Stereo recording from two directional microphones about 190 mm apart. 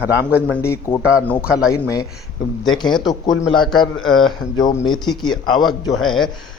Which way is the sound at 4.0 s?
Centre (ahead or behind).